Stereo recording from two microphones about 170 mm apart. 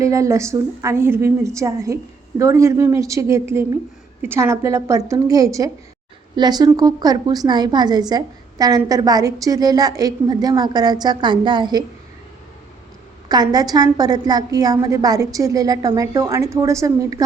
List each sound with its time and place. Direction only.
0.0 s a woman's voice: 20° right (ahead or behind)
13.2 s a woman's voice: 25° right (ahead or behind)